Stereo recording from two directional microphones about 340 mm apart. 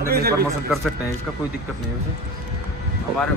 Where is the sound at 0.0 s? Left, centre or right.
Right.